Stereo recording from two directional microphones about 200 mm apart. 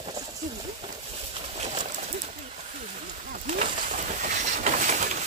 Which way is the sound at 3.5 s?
40° right (ahead or behind).